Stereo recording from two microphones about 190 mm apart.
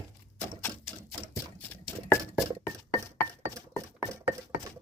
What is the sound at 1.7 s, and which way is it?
Chopping, 15° left (ahead or behind).